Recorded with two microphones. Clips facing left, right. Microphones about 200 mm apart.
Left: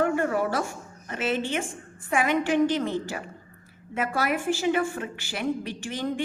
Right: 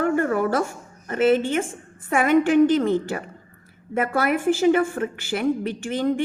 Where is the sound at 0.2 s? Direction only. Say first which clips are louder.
Right 4 dB; 50° right (ahead or behind).